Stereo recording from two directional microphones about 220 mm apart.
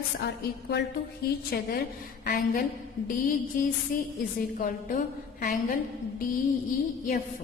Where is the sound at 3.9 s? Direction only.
40° left (ahead or behind).